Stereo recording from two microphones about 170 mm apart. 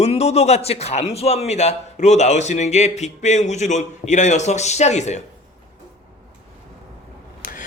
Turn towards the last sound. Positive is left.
turn(degrees=50)  # may be behind; listen again after turning